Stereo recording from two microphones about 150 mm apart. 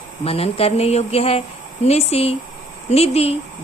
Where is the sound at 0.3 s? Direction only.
40° left (ahead or behind).